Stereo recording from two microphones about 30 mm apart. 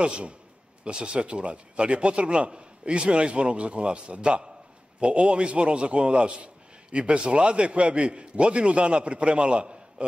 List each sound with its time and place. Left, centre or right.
0.0 s a man's voice: right